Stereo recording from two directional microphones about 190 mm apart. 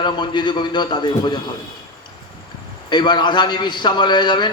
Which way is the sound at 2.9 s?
25° left (ahead or behind).